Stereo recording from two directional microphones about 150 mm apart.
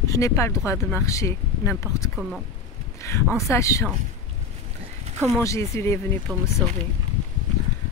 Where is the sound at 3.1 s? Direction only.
20° left (ahead or behind).